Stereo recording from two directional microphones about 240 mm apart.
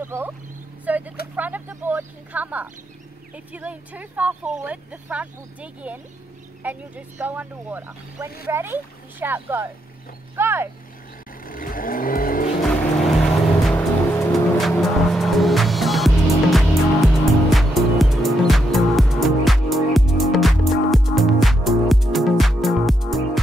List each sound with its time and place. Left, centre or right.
0.0 s speech: centre
0.8 s a sound: centre
1.3 s speech: centre
11.4 s vehicle: left
12.6 s vehicle: centre